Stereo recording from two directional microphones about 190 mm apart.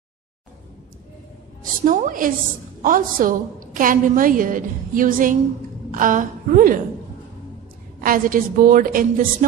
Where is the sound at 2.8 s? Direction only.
45° right (ahead or behind).